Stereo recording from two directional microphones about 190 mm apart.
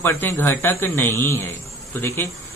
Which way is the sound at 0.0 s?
10° left (ahead or behind).